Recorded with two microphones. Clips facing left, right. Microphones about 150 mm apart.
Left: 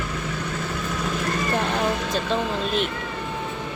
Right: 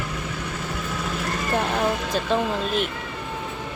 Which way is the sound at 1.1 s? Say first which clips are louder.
Even; 10° right (ahead or behind).